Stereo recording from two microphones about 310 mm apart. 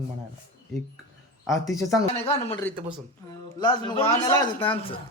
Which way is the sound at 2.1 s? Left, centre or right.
Centre.